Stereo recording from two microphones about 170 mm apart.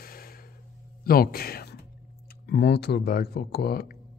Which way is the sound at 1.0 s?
60° left (ahead or behind).